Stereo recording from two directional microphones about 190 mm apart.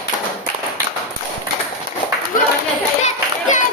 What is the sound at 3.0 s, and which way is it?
Children playing, 40° left (ahead or behind).